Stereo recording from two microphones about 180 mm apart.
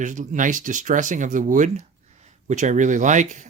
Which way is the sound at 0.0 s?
45° right (ahead or behind).